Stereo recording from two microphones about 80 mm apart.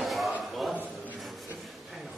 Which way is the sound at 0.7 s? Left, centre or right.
Centre.